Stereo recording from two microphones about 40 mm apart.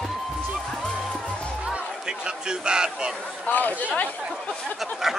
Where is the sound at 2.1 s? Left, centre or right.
Right.